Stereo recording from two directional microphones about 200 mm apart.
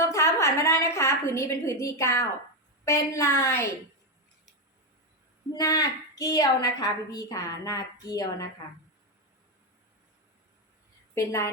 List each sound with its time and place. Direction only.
0.0 s a woman's voice: 15° left (ahead or behind)
5.5 s a woman's voice: 20° left (ahead or behind)
11.1 s a woman's voice: 15° left (ahead or behind)